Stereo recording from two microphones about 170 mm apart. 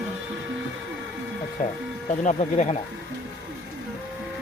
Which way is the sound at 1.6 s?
50° left (ahead or behind).